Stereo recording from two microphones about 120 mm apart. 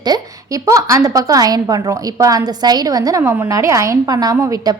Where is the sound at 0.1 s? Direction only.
35° right (ahead or behind).